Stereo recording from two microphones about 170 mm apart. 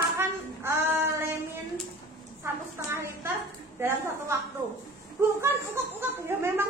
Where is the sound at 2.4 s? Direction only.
15° right (ahead or behind).